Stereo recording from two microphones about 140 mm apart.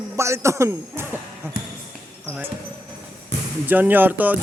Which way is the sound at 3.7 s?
15° right (ahead or behind).